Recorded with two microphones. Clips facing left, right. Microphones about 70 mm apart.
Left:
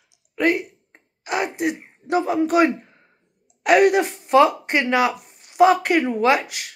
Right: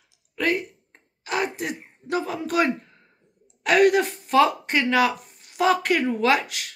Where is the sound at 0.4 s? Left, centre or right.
Centre.